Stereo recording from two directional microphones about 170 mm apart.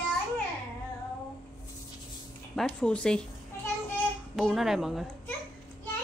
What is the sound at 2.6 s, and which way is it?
Speech, 5° left (ahead or behind).